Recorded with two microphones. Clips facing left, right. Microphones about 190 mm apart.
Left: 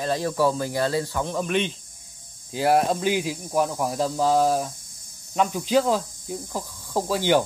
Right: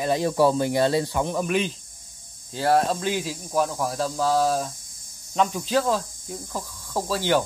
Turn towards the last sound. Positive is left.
turn(degrees=15)  # may be behind; listen again after turning